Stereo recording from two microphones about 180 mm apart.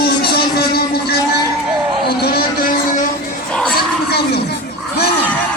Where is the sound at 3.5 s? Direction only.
5° left (ahead or behind).